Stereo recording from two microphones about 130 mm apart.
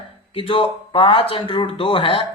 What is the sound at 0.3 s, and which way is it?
Speech, 40° left (ahead or behind).